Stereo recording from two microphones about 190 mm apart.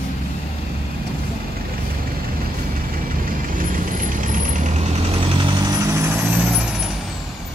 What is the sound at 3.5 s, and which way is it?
Vehicle, 45° right (ahead or behind).